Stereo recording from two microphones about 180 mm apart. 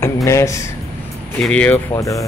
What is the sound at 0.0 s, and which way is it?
Speech, 15° left (ahead or behind).